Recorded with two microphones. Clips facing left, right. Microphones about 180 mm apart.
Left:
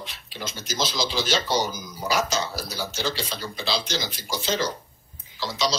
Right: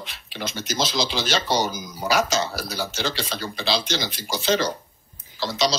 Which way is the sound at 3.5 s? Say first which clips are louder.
Right 3 dB; 70° right (ahead or behind).